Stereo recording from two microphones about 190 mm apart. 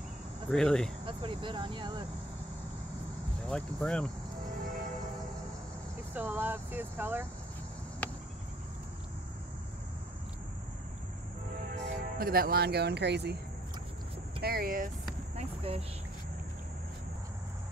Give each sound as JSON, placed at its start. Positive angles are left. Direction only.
{"t": 0.5, "sound": "speech", "side_deg": 5}
{"t": 1.0, "sound": "speech", "side_deg": -25}
{"t": 3.4, "sound": "speech", "side_deg": 5}
{"t": 6.1, "sound": "speech", "side_deg": -10}
{"t": 8.0, "sound": "a sound", "side_deg": 5}
{"t": 11.7, "sound": "speech", "side_deg": -50}
{"t": 14.4, "sound": "speech", "side_deg": -55}
{"t": 15.3, "sound": "a sound", "side_deg": -30}